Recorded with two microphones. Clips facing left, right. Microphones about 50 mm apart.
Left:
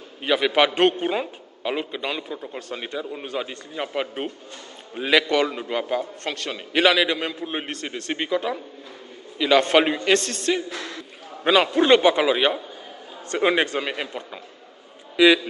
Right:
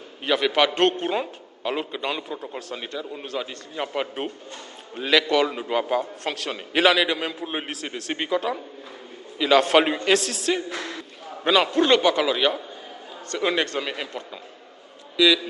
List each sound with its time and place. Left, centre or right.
0.2 s a man's voice: centre
10.7 s a sound: centre
11.4 s a man's voice: centre
15.1 s speech: left